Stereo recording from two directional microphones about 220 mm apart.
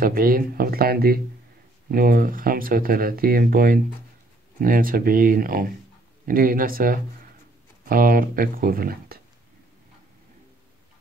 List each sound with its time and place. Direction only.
0.0 s speech: 40° right (ahead or behind)